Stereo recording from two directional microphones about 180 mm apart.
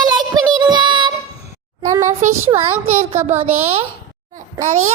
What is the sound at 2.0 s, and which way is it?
A child's voice, 35° right (ahead or behind).